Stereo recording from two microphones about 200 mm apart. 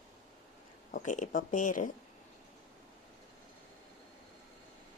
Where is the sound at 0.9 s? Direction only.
40° left (ahead or behind).